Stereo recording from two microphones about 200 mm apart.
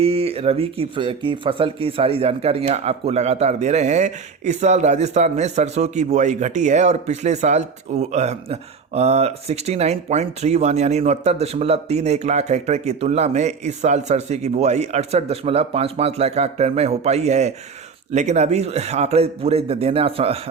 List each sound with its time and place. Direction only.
0.0 s speech: 30° right (ahead or behind)